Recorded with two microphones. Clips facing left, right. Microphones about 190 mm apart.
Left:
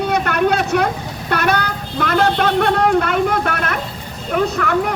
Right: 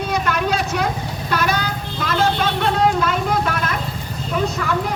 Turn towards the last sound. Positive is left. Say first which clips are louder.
# left 4 dB
turn(degrees=60)  # may be behind; listen again after turning